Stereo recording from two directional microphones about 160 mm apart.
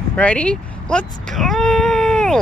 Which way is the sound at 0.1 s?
10° left (ahead or behind).